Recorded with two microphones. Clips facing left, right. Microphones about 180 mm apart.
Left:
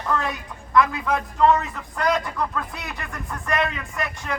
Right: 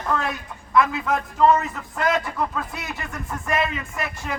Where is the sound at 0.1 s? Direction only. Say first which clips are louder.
Even; 5° right (ahead or behind).